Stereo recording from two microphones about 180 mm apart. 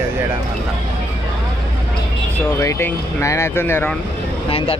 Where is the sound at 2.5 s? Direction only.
15° left (ahead or behind).